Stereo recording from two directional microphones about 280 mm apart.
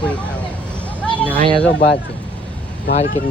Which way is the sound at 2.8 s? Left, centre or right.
Left.